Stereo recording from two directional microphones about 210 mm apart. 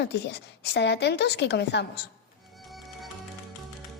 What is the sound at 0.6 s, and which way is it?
A woman's voice, 55° left (ahead or behind).